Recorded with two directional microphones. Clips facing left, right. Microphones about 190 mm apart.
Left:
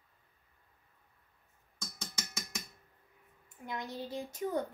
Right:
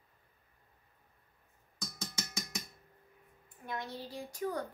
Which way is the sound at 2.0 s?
Centre (ahead or behind).